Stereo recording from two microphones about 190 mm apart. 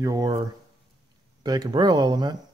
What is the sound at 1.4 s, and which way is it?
Speech, 20° right (ahead or behind).